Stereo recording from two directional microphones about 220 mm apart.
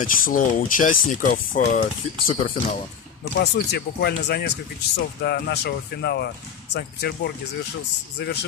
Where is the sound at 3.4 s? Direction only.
50° left (ahead or behind).